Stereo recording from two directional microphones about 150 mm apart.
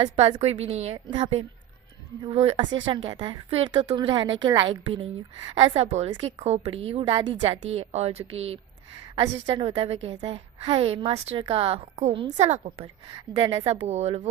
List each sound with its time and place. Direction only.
0.2 s a woman's voice: 45° right (ahead or behind)
5.7 s speech: 45° right (ahead or behind)
7.6 s a woman's voice: 45° right (ahead or behind)